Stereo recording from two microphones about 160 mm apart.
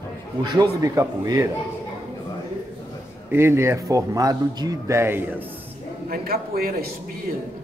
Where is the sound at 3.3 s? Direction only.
15° right (ahead or behind).